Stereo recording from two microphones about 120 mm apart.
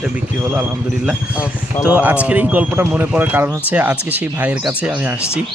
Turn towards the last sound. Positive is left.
turn(degrees=-15)  # may be behind; listen again after turning